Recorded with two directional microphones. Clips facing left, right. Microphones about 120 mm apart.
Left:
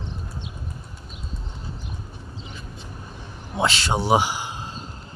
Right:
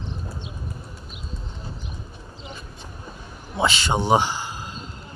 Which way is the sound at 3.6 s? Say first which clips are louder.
Right 1 dB; centre (ahead or behind).